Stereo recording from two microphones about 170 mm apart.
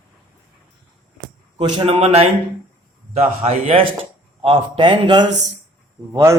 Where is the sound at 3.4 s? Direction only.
35° right (ahead or behind).